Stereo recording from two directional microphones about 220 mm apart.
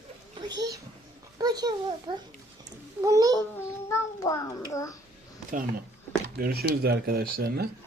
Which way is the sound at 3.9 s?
15° left (ahead or behind).